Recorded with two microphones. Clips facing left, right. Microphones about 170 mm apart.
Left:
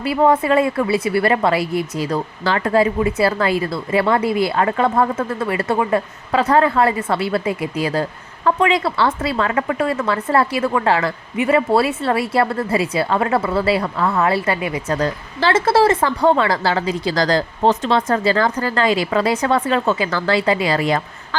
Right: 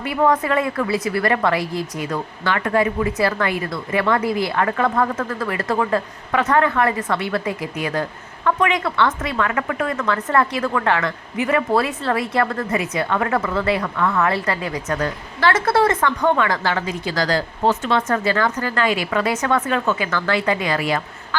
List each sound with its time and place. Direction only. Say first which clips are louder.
0.0 s speech: left 3 dB; 30° left (ahead or behind)